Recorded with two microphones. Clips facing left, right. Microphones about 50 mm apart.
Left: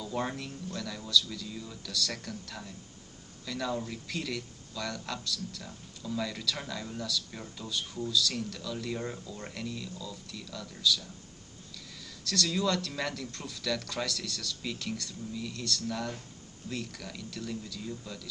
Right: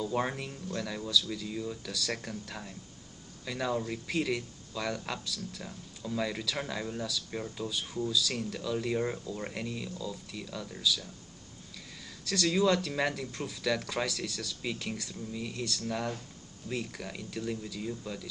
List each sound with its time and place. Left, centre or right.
0.0 s speech: centre
12.3 s speech: centre